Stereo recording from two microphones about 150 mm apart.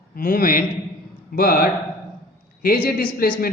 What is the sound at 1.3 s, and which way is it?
A man's voice, 80° left.